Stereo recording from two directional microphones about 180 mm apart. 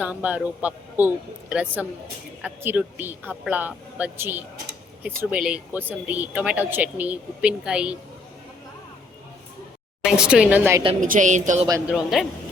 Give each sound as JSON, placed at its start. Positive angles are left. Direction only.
{"t": 0.0, "sound": "speech", "side_deg": -10}
{"t": 10.0, "sound": "speech", "side_deg": -5}
{"t": 11.0, "sound": "a woman's voice", "side_deg": -45}
{"t": 11.9, "sound": "speech", "side_deg": 0}